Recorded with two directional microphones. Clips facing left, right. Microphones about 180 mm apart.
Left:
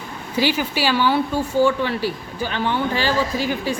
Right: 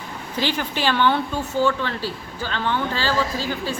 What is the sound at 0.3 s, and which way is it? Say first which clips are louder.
Speech: left 4 dB; 10° left (ahead or behind).